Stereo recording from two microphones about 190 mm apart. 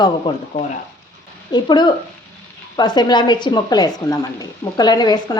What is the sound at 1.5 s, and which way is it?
Speech, 25° left (ahead or behind).